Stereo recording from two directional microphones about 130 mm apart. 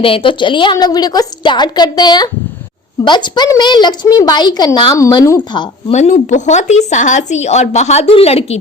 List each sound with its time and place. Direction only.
0.0 s a woman's voice: 45° left (ahead or behind); by 5.4 s 25° left (ahead or behind)
5.9 s speech: 60° left (ahead or behind)